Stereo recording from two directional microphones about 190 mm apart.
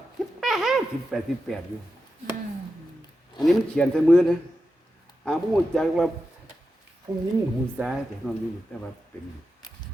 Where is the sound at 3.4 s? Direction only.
5° left (ahead or behind).